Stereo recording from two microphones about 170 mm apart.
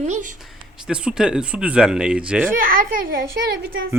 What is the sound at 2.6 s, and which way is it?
Speech, 55° right (ahead or behind).